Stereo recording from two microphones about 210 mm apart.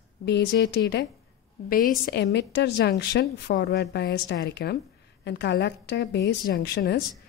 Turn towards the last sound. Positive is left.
turn(degrees=50)  # may be behind; listen again after turning